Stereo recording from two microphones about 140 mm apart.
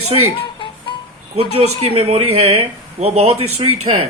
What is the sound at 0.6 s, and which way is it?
Music, 40° left (ahead or behind).